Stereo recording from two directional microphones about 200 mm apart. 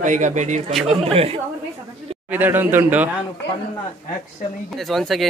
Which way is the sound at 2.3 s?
10° right (ahead or behind).